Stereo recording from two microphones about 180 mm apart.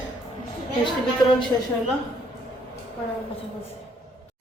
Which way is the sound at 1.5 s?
20° left (ahead or behind).